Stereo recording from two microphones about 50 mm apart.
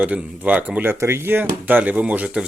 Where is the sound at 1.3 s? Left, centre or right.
Right.